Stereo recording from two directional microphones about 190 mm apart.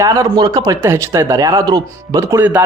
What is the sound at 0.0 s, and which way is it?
A man's voice, 15° right (ahead or behind).